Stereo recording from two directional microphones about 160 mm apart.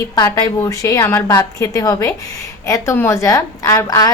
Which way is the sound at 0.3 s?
20° left (ahead or behind).